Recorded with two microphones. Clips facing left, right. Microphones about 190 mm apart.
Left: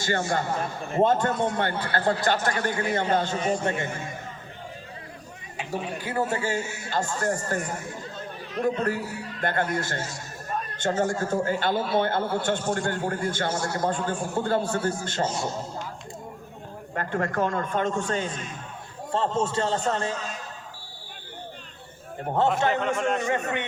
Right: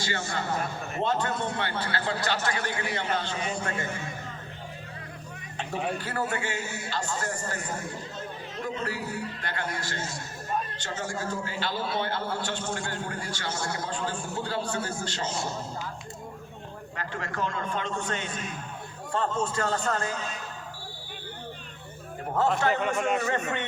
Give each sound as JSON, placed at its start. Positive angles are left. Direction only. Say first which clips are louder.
{"t": 0.0, "sound": "a man's voice", "louder": "left 6 dB", "side_deg": 50}
{"t": 3.6, "sound": "a man's voice", "louder": "left 5 dB", "side_deg": 25}
{"t": 5.5, "sound": "speech", "louder": "even", "side_deg": 15}
{"t": 6.3, "sound": "a man's voice", "louder": "left 4 dB", "side_deg": 40}
{"t": 9.4, "sound": "a man's voice", "louder": "left 7 dB", "side_deg": 50}
{"t": 16.9, "sound": "a man's voice", "louder": "left 8 dB", "side_deg": 50}
{"t": 19.1, "sound": "a man's voice", "louder": "left 3 dB", "side_deg": 30}
{"t": 22.6, "sound": "a man's voice", "louder": "left 2 dB", "side_deg": 20}
{"t": 23.0, "sound": "a man's voice", "louder": "left 1 dB", "side_deg": -5}
{"t": 23.2, "sound": "a man's voice", "louder": "left 2 dB", "side_deg": 15}